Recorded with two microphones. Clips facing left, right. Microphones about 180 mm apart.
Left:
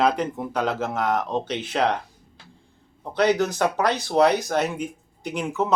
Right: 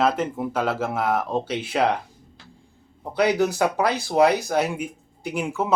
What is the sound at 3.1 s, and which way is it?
Speech, 10° right (ahead or behind).